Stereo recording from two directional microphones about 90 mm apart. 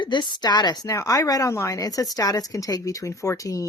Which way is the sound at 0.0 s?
55° left (ahead or behind).